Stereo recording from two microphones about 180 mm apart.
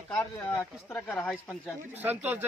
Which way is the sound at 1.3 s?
5° right (ahead or behind).